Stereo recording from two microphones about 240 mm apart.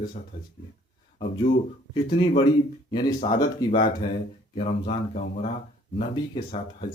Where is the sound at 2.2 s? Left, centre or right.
Left.